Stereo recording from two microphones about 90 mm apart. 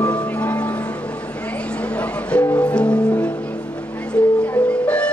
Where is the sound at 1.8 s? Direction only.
15° left (ahead or behind).